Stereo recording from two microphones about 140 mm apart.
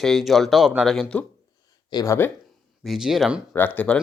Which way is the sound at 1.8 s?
25° left (ahead or behind).